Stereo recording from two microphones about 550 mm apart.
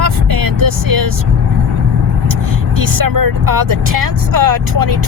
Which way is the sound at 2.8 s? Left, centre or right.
Right.